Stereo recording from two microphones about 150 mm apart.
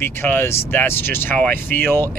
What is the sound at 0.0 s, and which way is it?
Speech, 15° left (ahead or behind).